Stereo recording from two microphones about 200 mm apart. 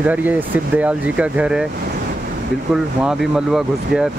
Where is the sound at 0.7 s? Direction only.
5° right (ahead or behind).